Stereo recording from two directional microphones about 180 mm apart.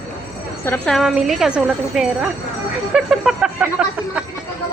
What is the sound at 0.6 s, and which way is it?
A woman's voice, 10° left (ahead or behind).